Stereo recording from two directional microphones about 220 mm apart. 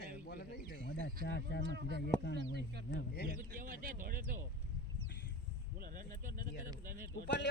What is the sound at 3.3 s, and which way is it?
Speech, 40° right (ahead or behind).